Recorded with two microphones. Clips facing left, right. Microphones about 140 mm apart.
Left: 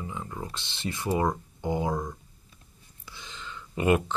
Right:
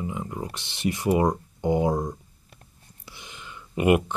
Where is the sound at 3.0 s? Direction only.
15° right (ahead or behind).